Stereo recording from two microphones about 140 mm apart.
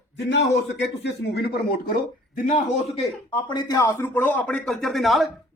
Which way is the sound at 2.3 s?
65° left (ahead or behind).